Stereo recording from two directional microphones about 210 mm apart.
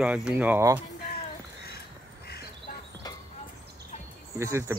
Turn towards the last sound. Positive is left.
turn(degrees=-15)  # may be behind; listen again after turning